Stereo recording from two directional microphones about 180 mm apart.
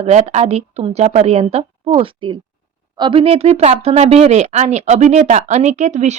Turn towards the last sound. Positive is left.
turn(degrees=-40)  # may be behind; listen again after turning